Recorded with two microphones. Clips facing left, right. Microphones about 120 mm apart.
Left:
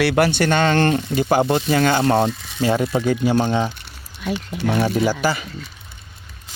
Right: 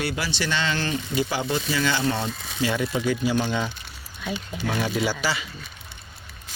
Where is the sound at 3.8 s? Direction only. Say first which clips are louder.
Left 6 dB; 70° left (ahead or behind); by 5.5 s 50° left (ahead or behind).